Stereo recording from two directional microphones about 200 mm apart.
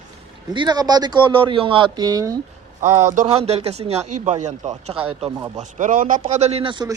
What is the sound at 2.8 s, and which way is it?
A man's voice, 35° right (ahead or behind).